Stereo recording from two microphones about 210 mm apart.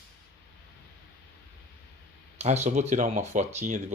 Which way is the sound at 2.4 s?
30° right (ahead or behind).